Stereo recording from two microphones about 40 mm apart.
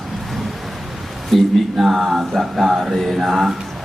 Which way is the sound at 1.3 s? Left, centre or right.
Centre.